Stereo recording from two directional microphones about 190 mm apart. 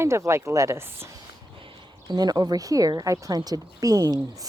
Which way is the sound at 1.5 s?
25° right (ahead or behind).